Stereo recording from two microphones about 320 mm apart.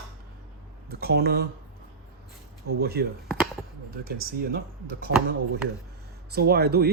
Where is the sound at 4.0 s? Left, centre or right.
Right.